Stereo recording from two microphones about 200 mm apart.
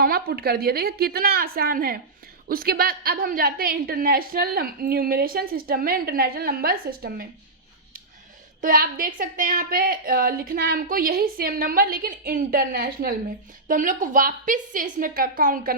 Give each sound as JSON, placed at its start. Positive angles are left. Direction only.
{"t": 0.0, "sound": "a woman's voice", "side_deg": -50}
{"t": 8.6, "sound": "a woman's voice", "side_deg": -45}